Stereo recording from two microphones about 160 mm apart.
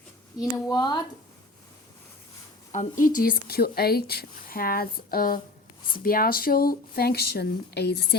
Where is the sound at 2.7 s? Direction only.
55° left (ahead or behind).